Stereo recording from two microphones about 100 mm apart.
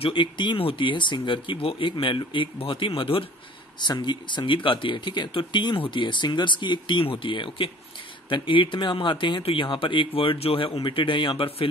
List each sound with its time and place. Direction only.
0.0 s speech: 50° left (ahead or behind)
3.8 s speech: 45° left (ahead or behind); by 11.7 s 65° left (ahead or behind)